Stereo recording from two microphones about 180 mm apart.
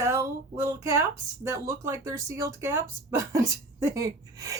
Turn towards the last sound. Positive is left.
turn(degrees=-20)  # may be behind; listen again after turning